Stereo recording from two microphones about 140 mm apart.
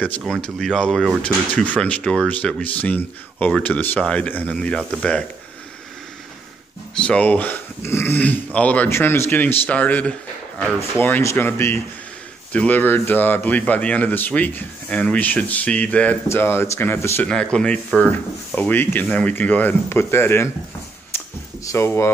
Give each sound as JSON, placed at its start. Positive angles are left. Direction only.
{"t": 0.2, "sound": "speech", "side_deg": 0}
{"t": 7.0, "sound": "speech", "side_deg": 10}
{"t": 17.3, "sound": "speech", "side_deg": 5}
{"t": 21.1, "sound": "a sound", "side_deg": 15}
{"t": 21.6, "sound": "speech", "side_deg": 20}